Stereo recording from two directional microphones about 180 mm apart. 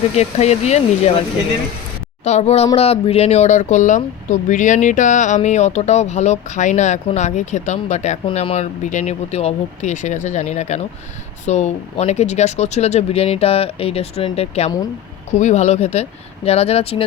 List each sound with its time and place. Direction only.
0.2 s speech: 35° left (ahead or behind)
2.2 s speech: 40° left (ahead or behind)